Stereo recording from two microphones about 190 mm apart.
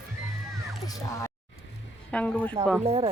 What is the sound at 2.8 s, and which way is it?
Speech, 25° right (ahead or behind).